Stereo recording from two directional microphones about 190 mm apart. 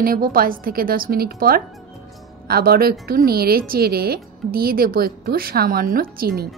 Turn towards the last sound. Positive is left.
turn(degrees=-55)  # may be behind; listen again after turning